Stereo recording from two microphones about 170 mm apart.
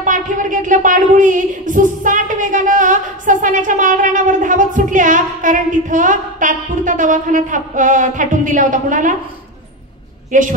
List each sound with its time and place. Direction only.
0.0 s speech: 50° right (ahead or behind)
10.3 s speech: 50° right (ahead or behind)